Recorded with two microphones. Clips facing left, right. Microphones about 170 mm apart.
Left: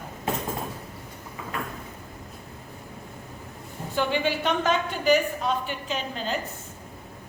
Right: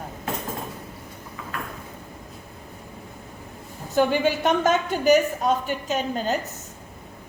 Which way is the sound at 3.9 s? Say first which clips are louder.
Right 5 dB; 45° right (ahead or behind).